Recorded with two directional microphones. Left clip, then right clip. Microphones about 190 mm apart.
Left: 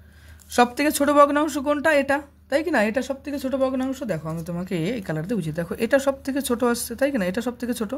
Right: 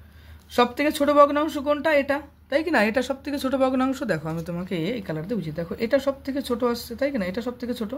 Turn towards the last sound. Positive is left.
turn(degrees=40)  # may be behind; listen again after turning